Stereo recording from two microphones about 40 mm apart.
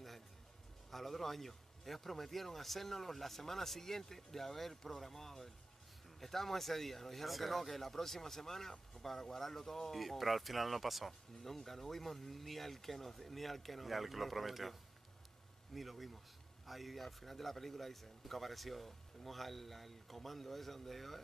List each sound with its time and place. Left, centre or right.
0.8 s a man's voice: centre